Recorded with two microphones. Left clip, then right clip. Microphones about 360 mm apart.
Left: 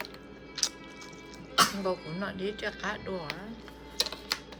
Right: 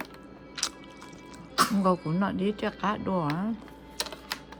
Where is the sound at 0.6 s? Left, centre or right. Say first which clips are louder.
Left 1 dB; centre.